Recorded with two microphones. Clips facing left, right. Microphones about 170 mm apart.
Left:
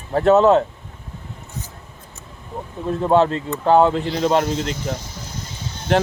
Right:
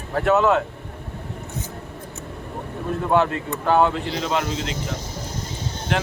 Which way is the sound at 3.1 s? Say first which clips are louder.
Left 4 dB; 30° left (ahead or behind).